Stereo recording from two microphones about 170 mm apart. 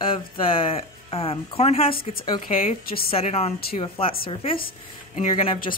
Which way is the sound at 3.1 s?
35° left (ahead or behind).